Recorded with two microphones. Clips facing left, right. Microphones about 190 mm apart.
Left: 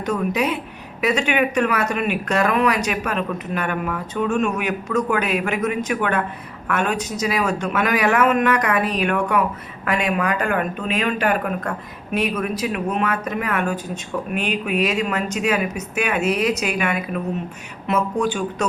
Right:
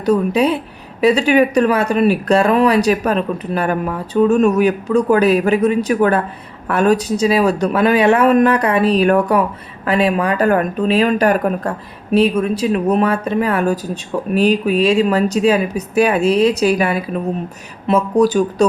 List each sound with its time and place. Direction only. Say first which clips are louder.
0.0 s speech: right 7 dB; 35° right (ahead or behind)